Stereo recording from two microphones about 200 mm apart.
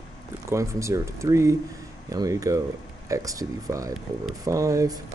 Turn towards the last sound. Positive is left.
turn(degrees=-15)  # may be behind; listen again after turning